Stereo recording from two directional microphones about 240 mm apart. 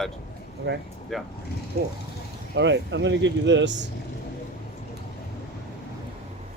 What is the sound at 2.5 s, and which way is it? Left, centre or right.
Speech, right.